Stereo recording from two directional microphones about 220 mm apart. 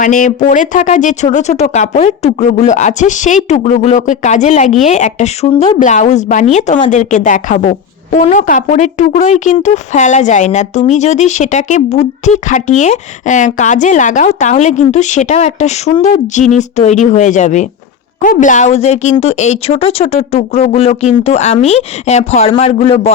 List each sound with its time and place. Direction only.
0.0 s speech: 35° left (ahead or behind)